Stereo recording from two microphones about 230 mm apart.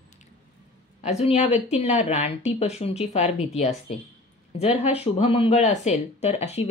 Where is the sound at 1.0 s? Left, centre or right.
Left.